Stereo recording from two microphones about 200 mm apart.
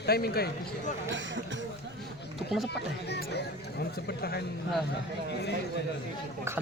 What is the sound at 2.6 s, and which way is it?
Speech, 55° left (ahead or behind).